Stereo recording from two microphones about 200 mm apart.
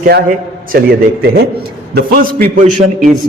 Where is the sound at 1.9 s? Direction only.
45° right (ahead or behind).